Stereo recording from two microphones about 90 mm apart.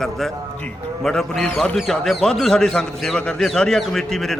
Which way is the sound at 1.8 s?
Centre (ahead or behind).